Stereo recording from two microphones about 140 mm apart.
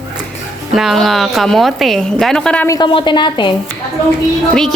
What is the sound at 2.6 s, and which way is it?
Speech, 30° left (ahead or behind).